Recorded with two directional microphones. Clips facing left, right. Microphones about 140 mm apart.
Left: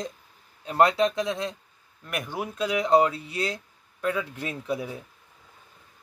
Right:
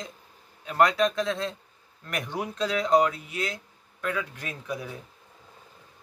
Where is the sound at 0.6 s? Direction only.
25° left (ahead or behind).